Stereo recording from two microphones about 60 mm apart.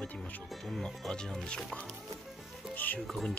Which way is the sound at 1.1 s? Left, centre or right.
Centre.